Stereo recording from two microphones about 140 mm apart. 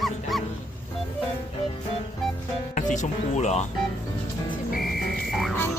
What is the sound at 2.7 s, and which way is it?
Speech, 60° left (ahead or behind).